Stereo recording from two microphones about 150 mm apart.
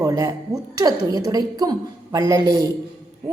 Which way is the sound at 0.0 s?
25° right (ahead or behind).